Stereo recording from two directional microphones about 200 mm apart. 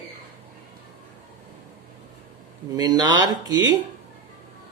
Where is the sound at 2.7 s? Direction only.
20° right (ahead or behind).